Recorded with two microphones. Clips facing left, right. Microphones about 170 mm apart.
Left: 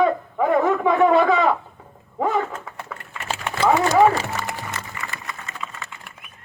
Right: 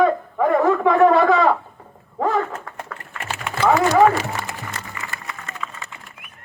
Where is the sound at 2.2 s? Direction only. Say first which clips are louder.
Right 1 dB; 5° left (ahead or behind).